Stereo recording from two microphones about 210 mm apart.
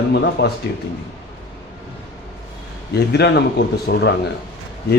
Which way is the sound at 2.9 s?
50° left (ahead or behind).